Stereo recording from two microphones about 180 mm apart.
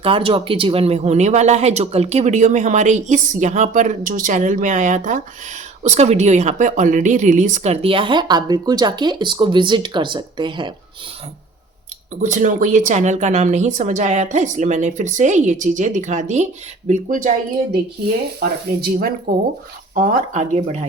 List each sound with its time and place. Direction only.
0.0 s a woman's voice: 30° right (ahead or behind)
12.2 s a woman's voice: 45° right (ahead or behind)
18.8 s speech: 60° right (ahead or behind)
19.9 s a woman's voice: 40° right (ahead or behind)